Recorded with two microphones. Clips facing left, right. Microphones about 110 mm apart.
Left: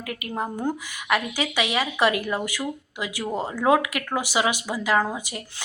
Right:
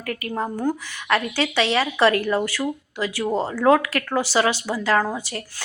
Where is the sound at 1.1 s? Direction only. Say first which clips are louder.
Right 3 dB; 15° left (ahead or behind).